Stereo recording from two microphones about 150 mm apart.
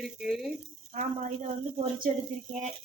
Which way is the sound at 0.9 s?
55° right (ahead or behind).